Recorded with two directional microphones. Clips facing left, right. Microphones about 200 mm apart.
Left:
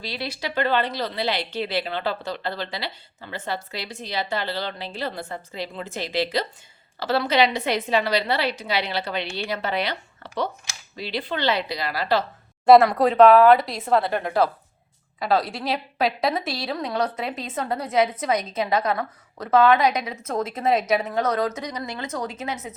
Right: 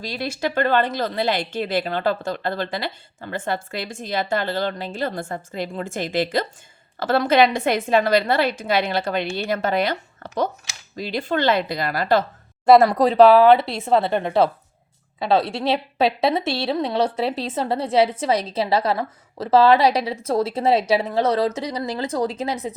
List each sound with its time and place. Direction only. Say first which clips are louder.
0.0 s speech: right 5 dB; 45° right (ahead or behind)
12.8 s a woman's voice: right 2 dB; 35° right (ahead or behind)